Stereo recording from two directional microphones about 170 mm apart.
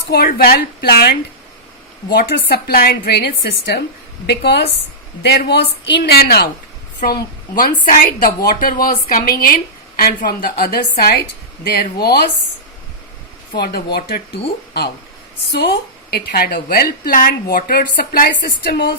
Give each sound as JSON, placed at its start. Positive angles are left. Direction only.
{"t": 0.1, "sound": "a woman's voice", "side_deg": 65}
{"t": 7.0, "sound": "a woman's voice", "side_deg": 60}
{"t": 13.5, "sound": "a woman's voice", "side_deg": 65}
{"t": 15.5, "sound": "a woman's voice", "side_deg": 70}